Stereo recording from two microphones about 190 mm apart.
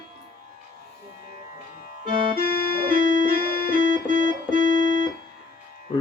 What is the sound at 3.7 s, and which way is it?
Organ, 45° right (ahead or behind).